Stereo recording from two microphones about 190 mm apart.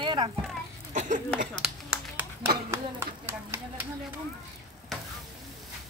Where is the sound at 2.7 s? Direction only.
15° right (ahead or behind).